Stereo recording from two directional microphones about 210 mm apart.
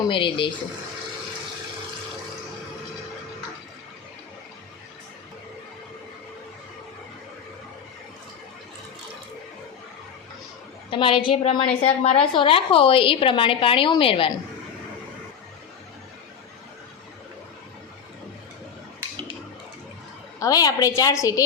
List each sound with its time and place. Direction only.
0.1 s a woman's voice: 25° left (ahead or behind)
10.9 s a woman's voice: 25° left (ahead or behind)
20.4 s a woman's voice: 15° left (ahead or behind)